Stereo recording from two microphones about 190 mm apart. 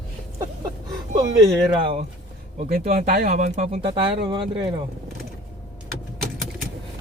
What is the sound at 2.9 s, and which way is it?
Speech, 50° right (ahead or behind).